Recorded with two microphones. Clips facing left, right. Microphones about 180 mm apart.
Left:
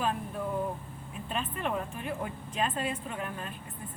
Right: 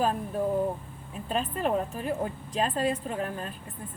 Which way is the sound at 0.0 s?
40° right (ahead or behind).